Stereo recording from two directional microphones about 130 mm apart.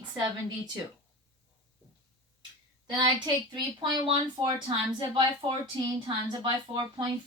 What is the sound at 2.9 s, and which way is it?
Speech, 30° right (ahead or behind).